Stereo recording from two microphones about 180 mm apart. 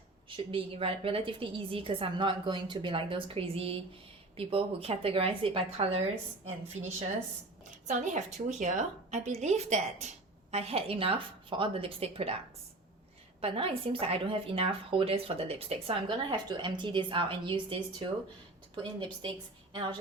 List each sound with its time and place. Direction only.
0.3 s a woman's voice: 30° right (ahead or behind)
7.9 s a woman's voice: 40° right (ahead or behind)
13.4 s a woman's voice: 30° right (ahead or behind)